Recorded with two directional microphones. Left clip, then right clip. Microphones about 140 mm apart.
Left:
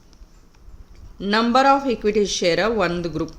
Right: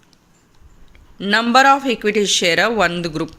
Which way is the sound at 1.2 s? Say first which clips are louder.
Right 4 dB; 15° right (ahead or behind).